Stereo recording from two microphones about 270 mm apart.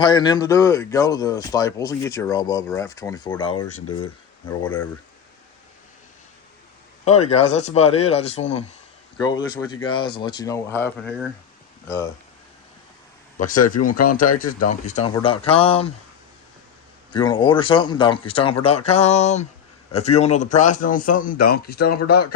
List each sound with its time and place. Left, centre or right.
0.0 s speech: centre
7.0 s a man's voice: left
9.8 s speech: centre
13.4 s a man's voice: left
17.1 s a man's voice: centre; by 22.3 s left